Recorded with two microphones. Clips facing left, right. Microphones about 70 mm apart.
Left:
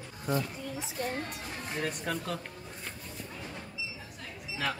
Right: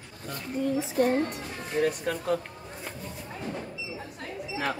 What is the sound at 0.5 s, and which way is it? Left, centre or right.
Speech, right.